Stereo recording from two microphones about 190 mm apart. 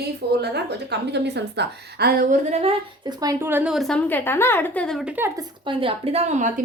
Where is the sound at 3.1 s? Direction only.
20° right (ahead or behind).